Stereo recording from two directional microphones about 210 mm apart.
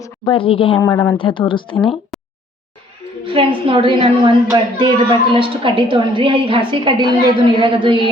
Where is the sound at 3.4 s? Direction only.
25° right (ahead or behind).